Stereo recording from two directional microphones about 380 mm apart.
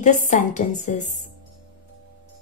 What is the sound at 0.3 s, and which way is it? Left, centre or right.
Speech, centre.